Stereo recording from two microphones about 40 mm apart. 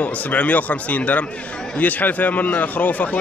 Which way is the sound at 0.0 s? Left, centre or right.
Left.